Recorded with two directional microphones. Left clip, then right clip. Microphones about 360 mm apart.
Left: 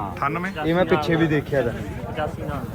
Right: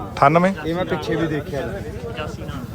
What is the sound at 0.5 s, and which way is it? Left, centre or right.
Speech, left.